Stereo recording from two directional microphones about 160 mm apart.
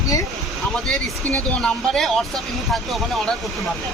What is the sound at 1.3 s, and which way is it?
Speech, 5° left (ahead or behind).